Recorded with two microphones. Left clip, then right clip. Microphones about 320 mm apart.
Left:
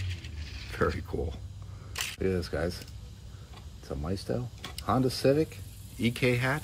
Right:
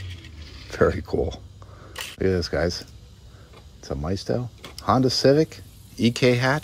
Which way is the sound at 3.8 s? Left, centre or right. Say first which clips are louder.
Right 7 dB; right.